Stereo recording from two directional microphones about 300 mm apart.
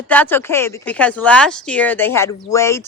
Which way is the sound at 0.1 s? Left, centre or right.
Centre.